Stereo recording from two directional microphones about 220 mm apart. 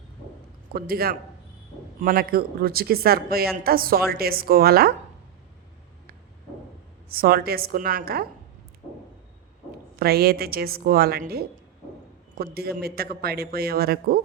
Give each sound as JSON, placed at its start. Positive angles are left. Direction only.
{"t": 0.7, "sound": "speech", "side_deg": -45}
{"t": 7.1, "sound": "speech", "side_deg": -45}
{"t": 10.0, "sound": "speech", "side_deg": -45}